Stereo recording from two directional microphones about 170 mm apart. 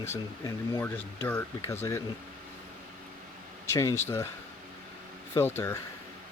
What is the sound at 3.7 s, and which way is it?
Speech, 20° left (ahead or behind).